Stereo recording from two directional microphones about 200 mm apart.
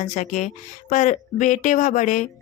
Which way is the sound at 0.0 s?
40° left (ahead or behind).